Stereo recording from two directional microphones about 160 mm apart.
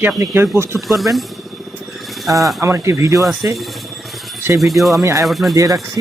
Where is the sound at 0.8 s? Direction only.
Centre (ahead or behind).